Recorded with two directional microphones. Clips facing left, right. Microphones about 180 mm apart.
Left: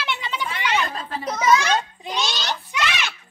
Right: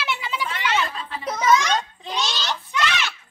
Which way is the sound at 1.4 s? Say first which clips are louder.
Even; 10° left (ahead or behind).